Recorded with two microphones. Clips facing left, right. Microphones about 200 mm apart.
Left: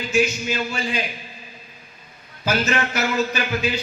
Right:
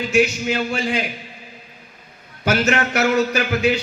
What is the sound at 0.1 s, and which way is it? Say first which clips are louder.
Speech: right 2 dB; 70° right (ahead or behind).